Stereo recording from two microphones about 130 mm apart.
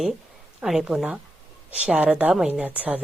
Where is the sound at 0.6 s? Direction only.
5° right (ahead or behind).